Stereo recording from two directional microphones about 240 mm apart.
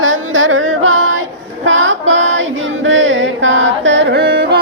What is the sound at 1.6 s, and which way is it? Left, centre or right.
Music, right.